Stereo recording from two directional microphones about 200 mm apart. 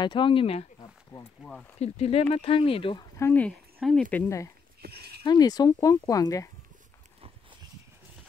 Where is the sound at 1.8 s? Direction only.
30° left (ahead or behind).